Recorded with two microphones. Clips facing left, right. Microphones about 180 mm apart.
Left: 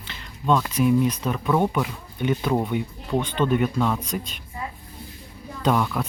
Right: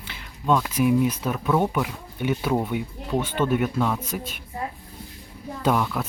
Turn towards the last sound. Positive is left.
turn(degrees=-5)  # may be behind; listen again after turning